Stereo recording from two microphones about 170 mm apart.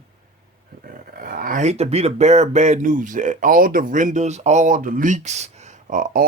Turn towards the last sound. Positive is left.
turn(degrees=-55)  # may be behind; listen again after turning